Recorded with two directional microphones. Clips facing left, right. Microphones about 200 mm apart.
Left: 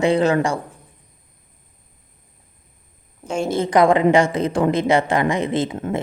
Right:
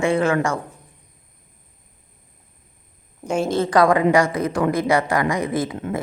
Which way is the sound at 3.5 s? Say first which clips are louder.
Left 2 dB; 20° left (ahead or behind).